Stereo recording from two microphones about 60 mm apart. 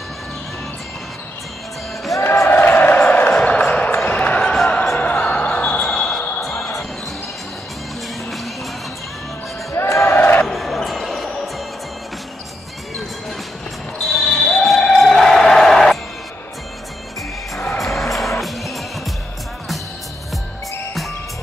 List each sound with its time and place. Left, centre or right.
2.2 s a sound: left
4.1 s basketball bounce: left
5.9 s music: centre
9.7 s a sound: left
10.1 s crowd: left
10.4 s basketball bounce: centre
13.9 s basketball bounce: centre
17.7 s music: centre